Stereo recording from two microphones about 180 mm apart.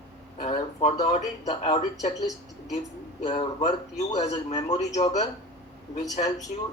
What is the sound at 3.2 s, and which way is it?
A man's voice, 35° left (ahead or behind).